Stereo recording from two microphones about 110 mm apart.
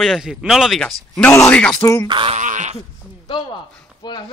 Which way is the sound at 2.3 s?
90° right.